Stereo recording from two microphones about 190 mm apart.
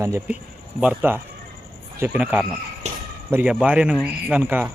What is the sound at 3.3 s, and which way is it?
A man's voice, 5° right (ahead or behind).